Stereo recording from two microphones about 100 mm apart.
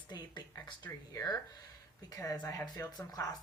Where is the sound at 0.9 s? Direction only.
35° left (ahead or behind).